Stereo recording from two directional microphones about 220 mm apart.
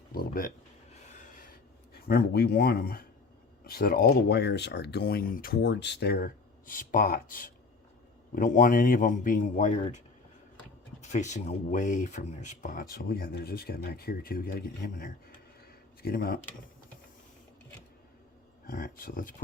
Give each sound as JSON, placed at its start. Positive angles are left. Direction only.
{"t": 0.1, "sound": "speech", "side_deg": 40}
{"t": 1.0, "sound": "a sound", "side_deg": 35}
{"t": 1.9, "sound": "speech", "side_deg": 45}
{"t": 11.0, "sound": "speech", "side_deg": 30}
{"t": 18.6, "sound": "speech", "side_deg": 40}